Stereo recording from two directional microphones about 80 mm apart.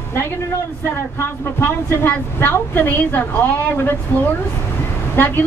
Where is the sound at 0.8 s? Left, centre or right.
Left.